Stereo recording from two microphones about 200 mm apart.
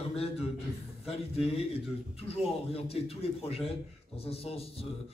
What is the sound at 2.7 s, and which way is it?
A man's voice, 30° left (ahead or behind).